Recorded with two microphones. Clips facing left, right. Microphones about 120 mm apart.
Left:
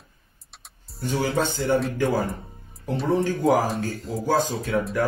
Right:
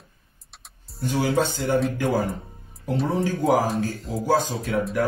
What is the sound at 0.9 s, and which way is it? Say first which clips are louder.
Speech: right 2 dB; 5° right (ahead or behind).